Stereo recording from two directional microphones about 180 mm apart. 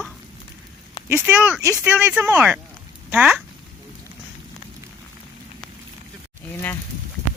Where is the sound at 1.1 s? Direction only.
5° right (ahead or behind).